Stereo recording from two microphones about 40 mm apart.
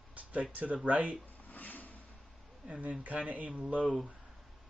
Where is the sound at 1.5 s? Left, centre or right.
Left.